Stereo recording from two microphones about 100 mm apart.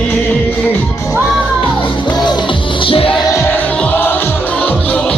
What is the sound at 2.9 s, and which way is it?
Music, 65° left (ahead or behind).